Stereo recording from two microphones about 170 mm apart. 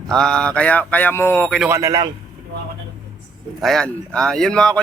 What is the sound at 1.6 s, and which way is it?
Speech, 15° right (ahead or behind).